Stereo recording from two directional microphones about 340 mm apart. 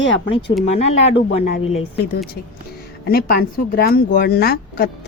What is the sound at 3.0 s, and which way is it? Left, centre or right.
Speech, left.